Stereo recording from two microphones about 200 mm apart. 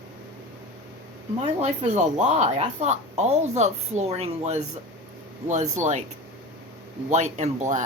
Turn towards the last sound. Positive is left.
turn(degrees=-35)  # may be behind; listen again after turning